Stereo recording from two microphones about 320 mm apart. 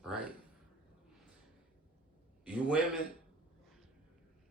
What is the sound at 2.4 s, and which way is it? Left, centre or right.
Speech, centre.